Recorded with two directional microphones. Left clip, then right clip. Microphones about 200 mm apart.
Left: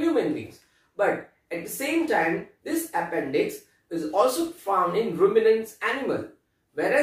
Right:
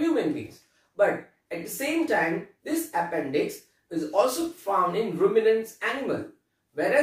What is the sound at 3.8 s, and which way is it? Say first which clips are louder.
Speech: left 1 dB; 5° right (ahead or behind).